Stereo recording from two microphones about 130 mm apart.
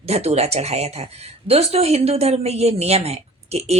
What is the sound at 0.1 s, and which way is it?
A woman's voice, 55° right (ahead or behind).